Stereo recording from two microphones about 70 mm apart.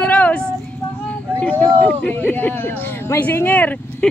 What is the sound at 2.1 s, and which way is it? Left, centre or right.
Speech, left.